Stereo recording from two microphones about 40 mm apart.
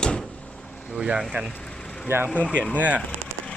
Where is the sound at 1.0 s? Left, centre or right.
Centre.